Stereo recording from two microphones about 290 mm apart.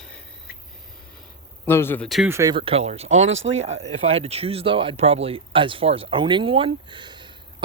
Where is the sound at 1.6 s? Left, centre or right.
Centre.